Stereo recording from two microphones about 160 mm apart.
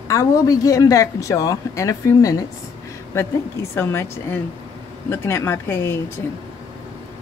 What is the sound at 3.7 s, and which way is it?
A woman's voice, 15° left (ahead or behind).